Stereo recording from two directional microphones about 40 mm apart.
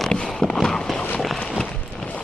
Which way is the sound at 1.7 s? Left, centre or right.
Left.